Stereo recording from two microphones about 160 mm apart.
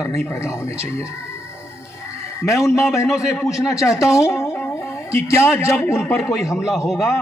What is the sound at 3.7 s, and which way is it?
A man's voice, 20° left (ahead or behind).